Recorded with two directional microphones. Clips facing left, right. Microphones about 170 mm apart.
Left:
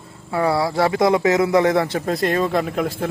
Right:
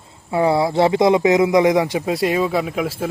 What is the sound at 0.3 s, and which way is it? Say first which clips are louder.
Speech: right 3 dB; 20° right (ahead or behind).